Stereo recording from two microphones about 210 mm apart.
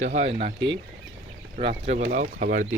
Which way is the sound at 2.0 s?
40° right (ahead or behind).